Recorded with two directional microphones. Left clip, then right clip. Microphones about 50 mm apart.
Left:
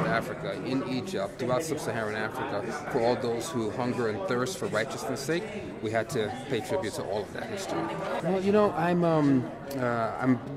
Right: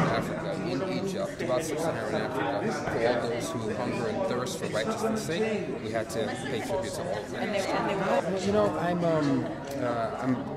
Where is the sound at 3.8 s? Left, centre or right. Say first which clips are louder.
Right 1 dB; left.